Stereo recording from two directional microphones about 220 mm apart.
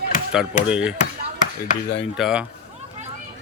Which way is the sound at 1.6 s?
50° left (ahead or behind).